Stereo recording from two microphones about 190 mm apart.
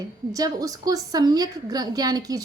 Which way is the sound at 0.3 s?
20° right (ahead or behind).